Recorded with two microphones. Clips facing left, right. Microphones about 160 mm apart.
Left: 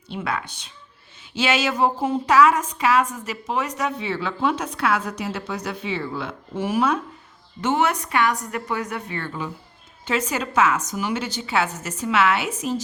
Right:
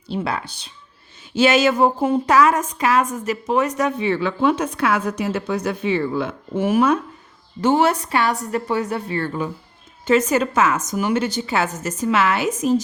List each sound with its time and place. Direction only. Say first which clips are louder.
0.1 s a woman's voice: right 3 dB; 35° right (ahead or behind)
1.4 s a woman's voice: right 6 dB; 45° right (ahead or behind)
7.6 s a woman's voice: right 5 dB; 35° right (ahead or behind)